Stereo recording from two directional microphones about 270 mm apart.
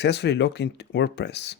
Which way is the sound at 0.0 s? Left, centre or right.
Left.